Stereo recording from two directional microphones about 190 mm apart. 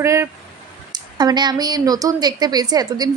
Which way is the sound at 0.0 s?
15° right (ahead or behind).